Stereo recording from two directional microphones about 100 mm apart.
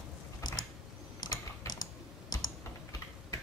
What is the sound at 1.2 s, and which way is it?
Typing, 40° left (ahead or behind).